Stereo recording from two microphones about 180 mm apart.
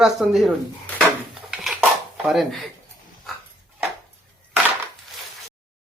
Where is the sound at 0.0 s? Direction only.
Centre (ahead or behind).